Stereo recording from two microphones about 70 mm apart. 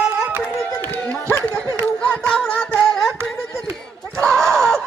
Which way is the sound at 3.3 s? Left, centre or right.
Centre.